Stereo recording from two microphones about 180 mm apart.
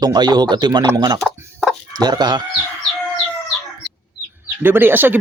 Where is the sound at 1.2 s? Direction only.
Centre (ahead or behind).